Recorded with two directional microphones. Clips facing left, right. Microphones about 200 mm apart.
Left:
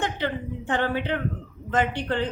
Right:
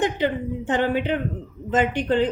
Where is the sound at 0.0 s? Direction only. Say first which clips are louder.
Right 5 dB; 20° right (ahead or behind).